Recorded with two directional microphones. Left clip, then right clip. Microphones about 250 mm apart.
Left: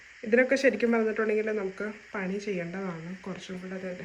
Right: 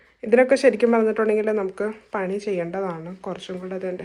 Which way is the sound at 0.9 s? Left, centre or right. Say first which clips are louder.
Right 7 dB; centre.